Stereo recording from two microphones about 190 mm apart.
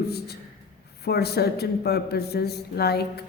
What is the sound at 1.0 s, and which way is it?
A woman's voice, 55° left (ahead or behind).